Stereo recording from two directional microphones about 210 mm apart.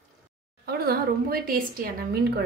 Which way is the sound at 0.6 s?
45° right (ahead or behind).